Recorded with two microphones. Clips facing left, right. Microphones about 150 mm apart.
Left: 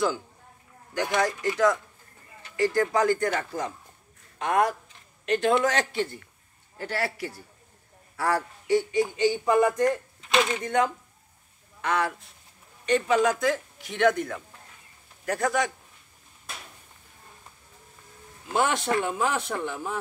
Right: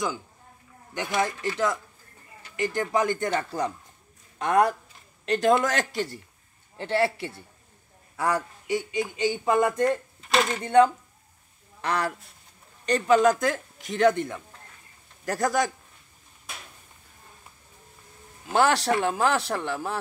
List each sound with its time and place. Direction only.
1.1 s speech: 25° right (ahead or behind)
2.5 s a man's voice: 20° right (ahead or behind); by 6.1 s 40° right (ahead or behind)
6.8 s speech: 25° right (ahead or behind)
9.4 s speech: 25° right (ahead or behind)
10.3 s speech: centre (ahead or behind)
10.6 s a man's voice: 30° right (ahead or behind)
15.2 s a man's voice: 40° right (ahead or behind)
18.5 s a man's voice: 85° right